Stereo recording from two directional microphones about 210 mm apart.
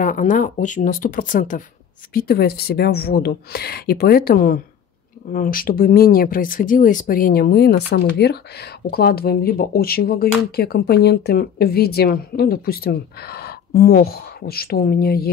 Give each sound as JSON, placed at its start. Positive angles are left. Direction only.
{"t": 0.0, "sound": "speech", "side_deg": 40}